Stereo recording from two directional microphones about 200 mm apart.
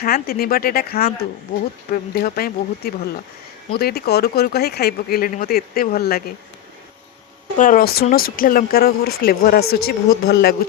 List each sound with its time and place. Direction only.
0.0 s speech: 50° left (ahead or behind)
7.5 s speech: 40° left (ahead or behind)